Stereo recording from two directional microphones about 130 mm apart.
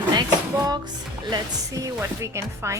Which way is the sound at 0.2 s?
30° right (ahead or behind).